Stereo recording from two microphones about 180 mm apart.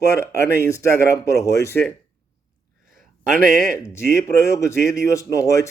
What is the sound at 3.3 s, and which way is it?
Speech, 50° right (ahead or behind).